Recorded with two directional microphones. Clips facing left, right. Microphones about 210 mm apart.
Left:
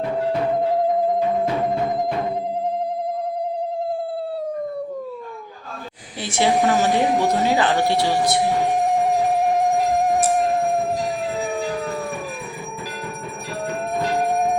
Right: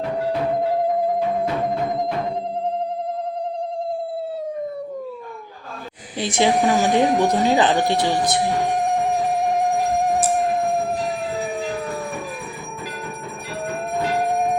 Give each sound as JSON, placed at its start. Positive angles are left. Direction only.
{"t": 6.1, "sound": "a woman's voice", "side_deg": -15}